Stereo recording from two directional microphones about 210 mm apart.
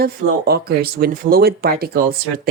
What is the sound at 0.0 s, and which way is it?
Speech, 45° right (ahead or behind).